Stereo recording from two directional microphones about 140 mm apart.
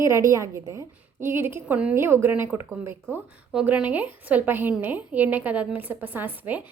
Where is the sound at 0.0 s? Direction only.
20° right (ahead or behind).